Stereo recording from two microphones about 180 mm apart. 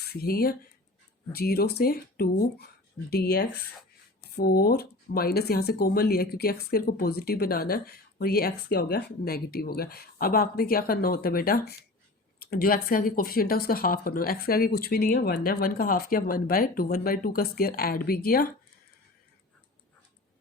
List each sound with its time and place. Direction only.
0.1 s speech: 55° left (ahead or behind)